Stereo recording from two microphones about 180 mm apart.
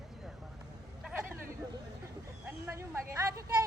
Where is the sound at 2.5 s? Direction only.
10° right (ahead or behind).